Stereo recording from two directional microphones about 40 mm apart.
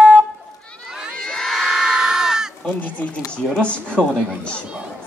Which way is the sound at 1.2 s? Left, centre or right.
Centre.